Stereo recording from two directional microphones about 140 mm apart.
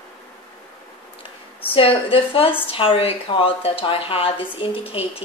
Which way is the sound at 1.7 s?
40° left (ahead or behind).